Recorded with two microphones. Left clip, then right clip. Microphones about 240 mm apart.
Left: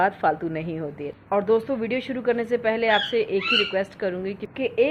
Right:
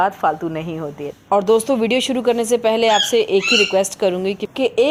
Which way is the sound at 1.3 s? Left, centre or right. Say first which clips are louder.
Right 7 dB; right.